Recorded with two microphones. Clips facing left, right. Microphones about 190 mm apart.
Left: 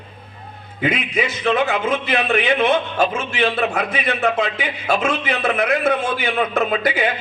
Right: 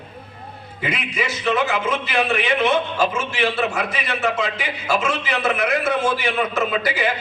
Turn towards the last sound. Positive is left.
turn(degrees=60)  # may be behind; listen again after turning